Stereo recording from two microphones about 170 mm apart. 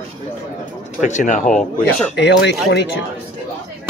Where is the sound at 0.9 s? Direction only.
45° left (ahead or behind).